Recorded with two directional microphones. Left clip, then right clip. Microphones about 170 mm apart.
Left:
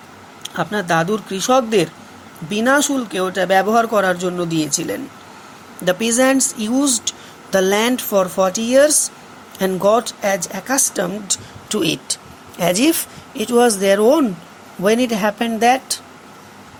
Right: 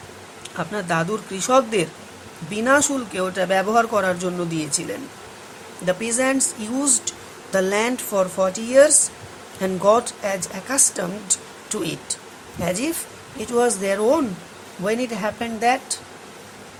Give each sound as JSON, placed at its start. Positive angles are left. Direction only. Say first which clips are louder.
{"t": 0.4, "sound": "speech", "louder": "left 6 dB", "side_deg": 25}